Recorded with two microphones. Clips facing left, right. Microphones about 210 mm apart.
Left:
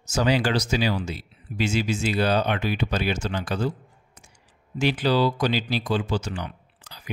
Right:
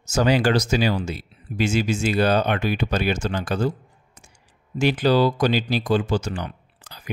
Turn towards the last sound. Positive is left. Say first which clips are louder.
# right 2 dB
turn(degrees=-50)  # may be behind; listen again after turning